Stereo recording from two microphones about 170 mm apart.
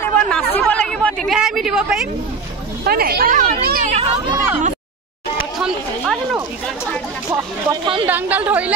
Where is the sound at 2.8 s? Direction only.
65° right (ahead or behind).